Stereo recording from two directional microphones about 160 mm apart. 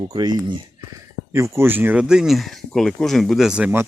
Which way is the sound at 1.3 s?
15° right (ahead or behind).